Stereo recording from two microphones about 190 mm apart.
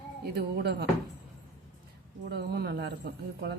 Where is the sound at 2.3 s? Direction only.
60° right (ahead or behind).